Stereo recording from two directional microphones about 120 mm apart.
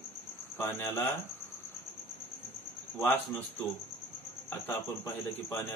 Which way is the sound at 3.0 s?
15° left (ahead or behind).